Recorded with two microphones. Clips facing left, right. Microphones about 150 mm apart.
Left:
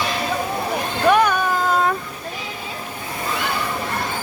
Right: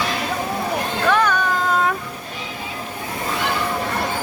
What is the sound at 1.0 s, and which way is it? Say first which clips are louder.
Vehicle: left 3 dB; 15° left (ahead or behind).